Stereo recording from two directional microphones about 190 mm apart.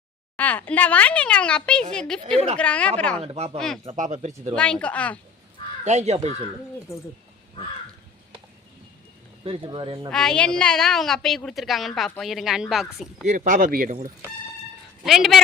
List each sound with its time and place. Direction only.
0.3 s a woman's voice: 10° left (ahead or behind)
3.2 s speech: 35° right (ahead or behind)
4.5 s speech: 5° left (ahead or behind)
5.8 s speech: 35° right (ahead or behind)
6.9 s speech: 15° left (ahead or behind)
9.4 s speech: 30° right (ahead or behind)
10.1 s a woman's voice: 5° left (ahead or behind)
13.2 s speech: 45° right (ahead or behind)
15.0 s a woman's voice: centre (ahead or behind)